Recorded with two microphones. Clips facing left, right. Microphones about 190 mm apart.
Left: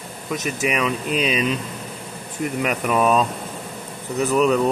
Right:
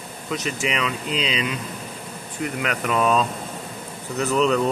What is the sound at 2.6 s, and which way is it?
Speech, 10° left (ahead or behind).